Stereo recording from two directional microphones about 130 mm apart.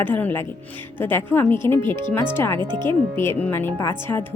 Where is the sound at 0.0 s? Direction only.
15° left (ahead or behind).